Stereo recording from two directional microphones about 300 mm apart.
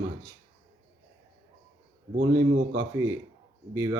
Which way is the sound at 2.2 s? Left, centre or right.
Centre.